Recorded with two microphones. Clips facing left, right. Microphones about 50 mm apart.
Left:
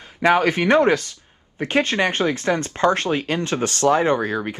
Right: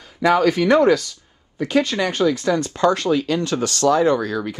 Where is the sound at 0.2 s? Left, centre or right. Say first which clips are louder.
Right 1 dB; left.